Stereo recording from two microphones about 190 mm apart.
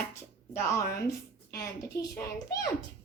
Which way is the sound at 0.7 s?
15° left (ahead or behind).